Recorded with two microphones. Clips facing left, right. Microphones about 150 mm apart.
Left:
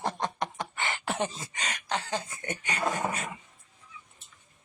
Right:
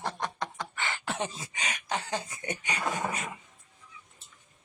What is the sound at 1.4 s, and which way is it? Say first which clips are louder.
Speech: even; 15° right (ahead or behind).